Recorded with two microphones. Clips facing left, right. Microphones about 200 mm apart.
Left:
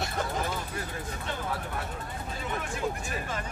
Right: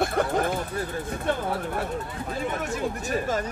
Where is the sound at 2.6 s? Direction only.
40° right (ahead or behind).